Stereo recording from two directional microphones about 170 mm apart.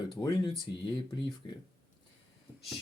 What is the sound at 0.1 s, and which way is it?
Speech, 25° left (ahead or behind).